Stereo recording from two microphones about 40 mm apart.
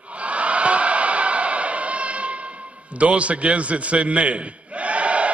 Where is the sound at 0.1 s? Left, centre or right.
Right.